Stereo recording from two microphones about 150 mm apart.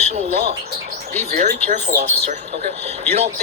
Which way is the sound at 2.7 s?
45° right (ahead or behind).